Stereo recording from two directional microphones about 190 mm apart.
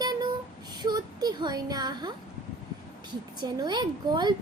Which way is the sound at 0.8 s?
20° right (ahead or behind).